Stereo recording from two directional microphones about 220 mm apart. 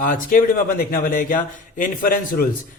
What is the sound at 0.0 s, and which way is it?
A man's voice, 40° left (ahead or behind).